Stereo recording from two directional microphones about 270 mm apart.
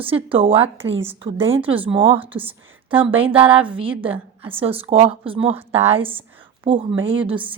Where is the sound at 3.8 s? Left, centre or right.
Centre.